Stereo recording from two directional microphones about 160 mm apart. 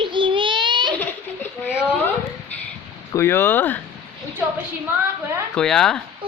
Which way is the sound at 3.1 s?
15° left (ahead or behind).